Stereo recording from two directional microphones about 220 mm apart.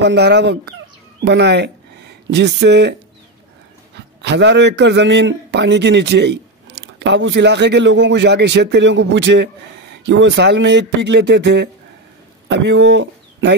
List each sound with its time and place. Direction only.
0.0 s a man's voice: 50° right (ahead or behind)
4.2 s a man's voice: 50° right (ahead or behind)